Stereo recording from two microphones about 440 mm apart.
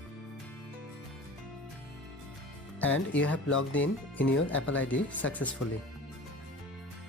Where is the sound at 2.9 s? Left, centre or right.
Left.